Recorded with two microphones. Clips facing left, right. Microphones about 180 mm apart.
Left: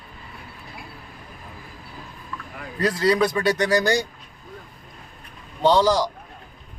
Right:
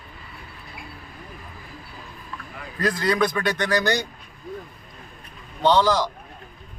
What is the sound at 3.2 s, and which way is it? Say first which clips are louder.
Speech: left 2 dB; 10° left (ahead or behind).